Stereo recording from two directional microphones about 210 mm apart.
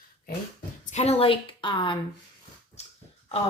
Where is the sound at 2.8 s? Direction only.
30° left (ahead or behind).